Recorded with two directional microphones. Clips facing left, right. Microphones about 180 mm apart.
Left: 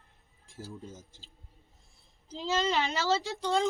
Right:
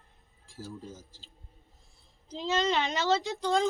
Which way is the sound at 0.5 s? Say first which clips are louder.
Right 1 dB; 20° left (ahead or behind).